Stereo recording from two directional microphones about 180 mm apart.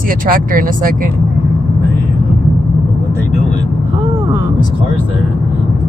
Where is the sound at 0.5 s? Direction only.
50° right (ahead or behind).